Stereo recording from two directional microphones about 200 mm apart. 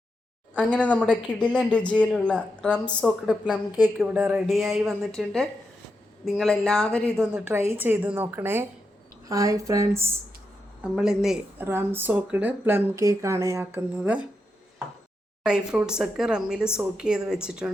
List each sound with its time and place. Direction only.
0.5 s a woman's voice: 5° left (ahead or behind)
7.3 s speech: 10° right (ahead or behind)
10.9 s speech: 5° right (ahead or behind)
15.4 s a woman's voice: 5° right (ahead or behind)